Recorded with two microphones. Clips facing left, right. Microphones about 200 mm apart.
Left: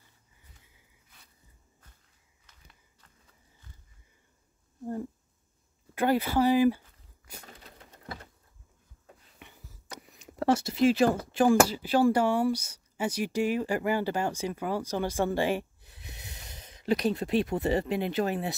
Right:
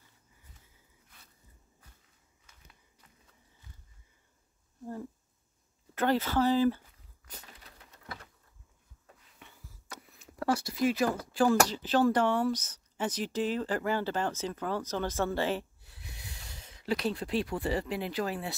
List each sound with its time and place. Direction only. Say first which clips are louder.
5.9 s speech: left 2 dB; 10° left (ahead or behind)
9.4 s a sound: left 1 dB; 20° left (ahead or behind)
11.1 s speech: left 3 dB; 20° left (ahead or behind)
11.6 s speech: left 2 dB; 10° left (ahead or behind)